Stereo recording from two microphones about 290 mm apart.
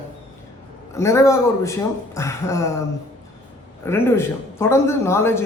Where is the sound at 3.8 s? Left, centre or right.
Centre.